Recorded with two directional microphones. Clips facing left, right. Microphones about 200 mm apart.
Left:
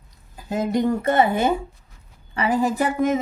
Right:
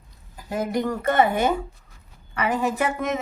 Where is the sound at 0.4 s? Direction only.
25° left (ahead or behind).